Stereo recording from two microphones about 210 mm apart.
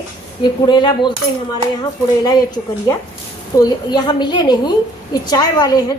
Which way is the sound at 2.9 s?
15° left (ahead or behind).